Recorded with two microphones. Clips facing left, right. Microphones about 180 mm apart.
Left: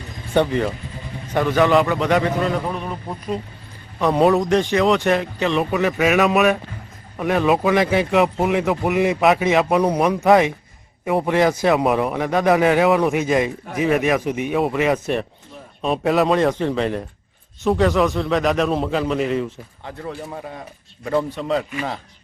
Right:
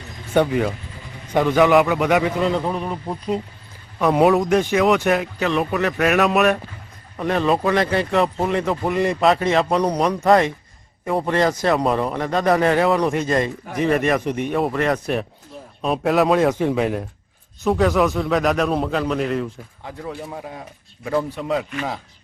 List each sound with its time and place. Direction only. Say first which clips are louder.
0.3 s a man's voice: even; 5° right (ahead or behind)
2.9 s a man's voice: right 2 dB; 20° right (ahead or behind)
4.0 s a man's voice: even; 5° right (ahead or behind)